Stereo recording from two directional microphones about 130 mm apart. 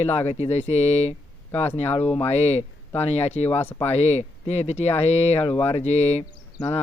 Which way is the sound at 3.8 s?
55° left (ahead or behind).